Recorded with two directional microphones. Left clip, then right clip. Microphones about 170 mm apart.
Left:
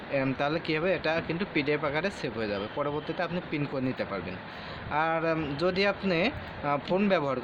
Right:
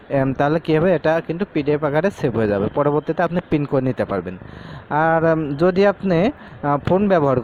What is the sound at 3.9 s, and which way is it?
Speech, 60° right (ahead or behind).